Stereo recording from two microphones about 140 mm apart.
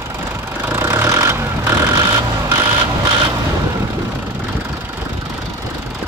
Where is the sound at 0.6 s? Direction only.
15° right (ahead or behind).